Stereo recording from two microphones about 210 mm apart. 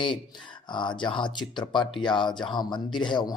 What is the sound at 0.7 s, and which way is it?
Speech, 20° left (ahead or behind).